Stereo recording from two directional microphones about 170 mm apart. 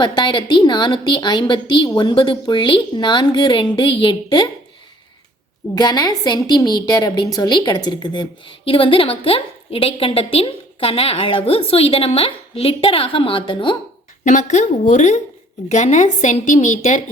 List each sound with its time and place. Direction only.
0.0 s a woman's voice: 25° left (ahead or behind)
5.7 s a woman's voice: 25° left (ahead or behind)
14.3 s a woman's voice: 45° left (ahead or behind)